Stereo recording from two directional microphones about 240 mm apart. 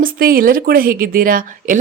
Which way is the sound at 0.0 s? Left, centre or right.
Right.